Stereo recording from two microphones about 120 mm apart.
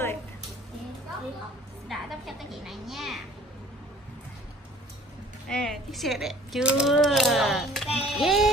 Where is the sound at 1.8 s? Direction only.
Centre (ahead or behind).